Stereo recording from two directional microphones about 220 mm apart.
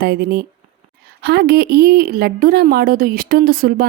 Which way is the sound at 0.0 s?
45° right (ahead or behind).